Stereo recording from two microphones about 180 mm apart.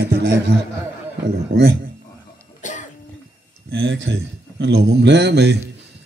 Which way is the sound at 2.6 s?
45° left (ahead or behind).